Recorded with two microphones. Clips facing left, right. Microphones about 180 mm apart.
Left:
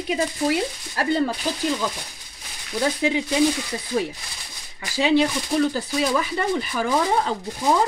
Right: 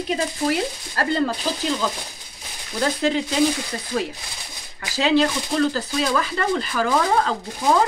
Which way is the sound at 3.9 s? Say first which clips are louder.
Left 1 dB; 10° left (ahead or behind).